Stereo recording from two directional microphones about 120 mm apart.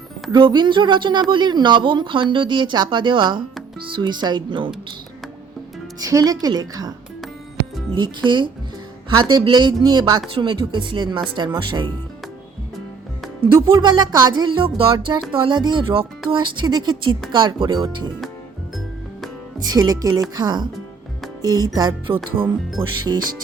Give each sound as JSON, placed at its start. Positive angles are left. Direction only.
{"t": 0.3, "sound": "speech", "side_deg": -40}
{"t": 6.0, "sound": "speech", "side_deg": -30}
{"t": 7.9, "sound": "speech", "side_deg": -40}
{"t": 13.5, "sound": "speech", "side_deg": -30}
{"t": 19.6, "sound": "speech", "side_deg": -30}